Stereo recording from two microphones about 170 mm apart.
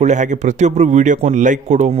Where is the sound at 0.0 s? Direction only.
45° right (ahead or behind).